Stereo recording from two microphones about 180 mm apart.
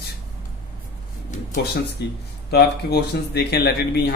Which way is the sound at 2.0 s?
65° left (ahead or behind).